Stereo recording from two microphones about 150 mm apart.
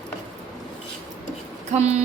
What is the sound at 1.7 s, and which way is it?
Speech, 45° right (ahead or behind).